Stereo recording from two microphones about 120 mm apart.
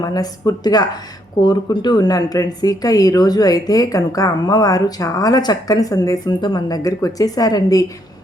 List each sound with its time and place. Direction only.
0.0 s speech: 30° left (ahead or behind)